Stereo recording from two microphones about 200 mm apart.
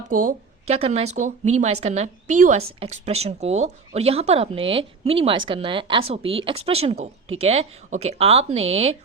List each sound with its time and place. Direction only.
0.1 s speech: 40° right (ahead or behind)